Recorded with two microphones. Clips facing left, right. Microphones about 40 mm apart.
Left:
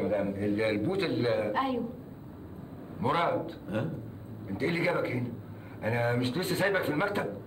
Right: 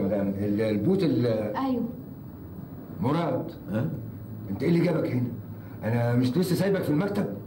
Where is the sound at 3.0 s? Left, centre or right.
Left.